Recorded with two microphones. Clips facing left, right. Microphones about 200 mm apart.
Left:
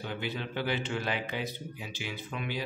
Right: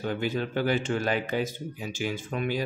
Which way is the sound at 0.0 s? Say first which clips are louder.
Right 7 dB; 45° right (ahead or behind).